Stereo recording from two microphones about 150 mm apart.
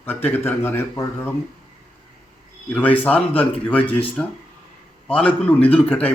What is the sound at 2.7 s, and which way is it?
A man's voice, 10° left (ahead or behind).